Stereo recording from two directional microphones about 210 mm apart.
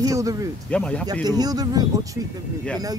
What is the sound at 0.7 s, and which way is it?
Speech, 5° left (ahead or behind).